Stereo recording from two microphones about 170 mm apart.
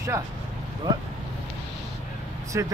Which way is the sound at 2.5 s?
15° right (ahead or behind).